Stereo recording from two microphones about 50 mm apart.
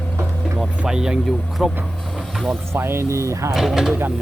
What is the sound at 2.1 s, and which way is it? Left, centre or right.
Music, centre.